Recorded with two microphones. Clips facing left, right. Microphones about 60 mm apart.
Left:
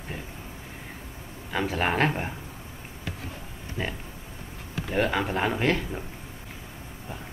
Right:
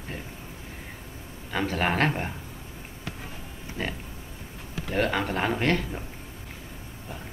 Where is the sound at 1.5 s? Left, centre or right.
Centre.